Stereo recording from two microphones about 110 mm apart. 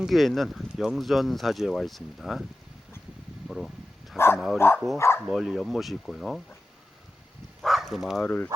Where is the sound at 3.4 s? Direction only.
Centre (ahead or behind).